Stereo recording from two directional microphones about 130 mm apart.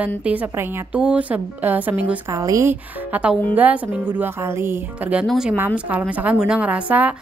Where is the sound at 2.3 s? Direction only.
25° right (ahead or behind).